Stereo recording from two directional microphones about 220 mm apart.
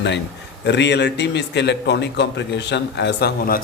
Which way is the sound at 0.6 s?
50° left (ahead or behind).